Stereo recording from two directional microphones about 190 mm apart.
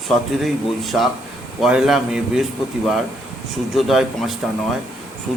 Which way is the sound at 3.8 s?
Centre (ahead or behind).